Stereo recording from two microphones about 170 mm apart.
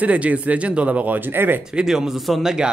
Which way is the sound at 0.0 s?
10° right (ahead or behind).